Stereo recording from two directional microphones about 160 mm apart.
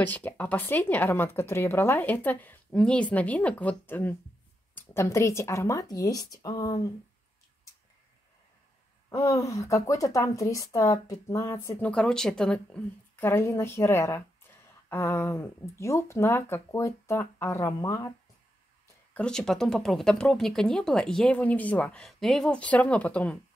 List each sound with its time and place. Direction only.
0.0 s a woman's voice: 10° left (ahead or behind)
9.1 s a woman's voice: 20° left (ahead or behind)
11.9 s speech: 5° left (ahead or behind)
19.1 s speech: 5° left (ahead or behind)